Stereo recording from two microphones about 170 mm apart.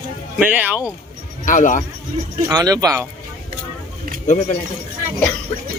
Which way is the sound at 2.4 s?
20° right (ahead or behind).